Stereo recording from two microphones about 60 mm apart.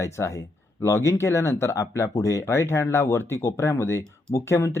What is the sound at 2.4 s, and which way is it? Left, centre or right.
Speech, left.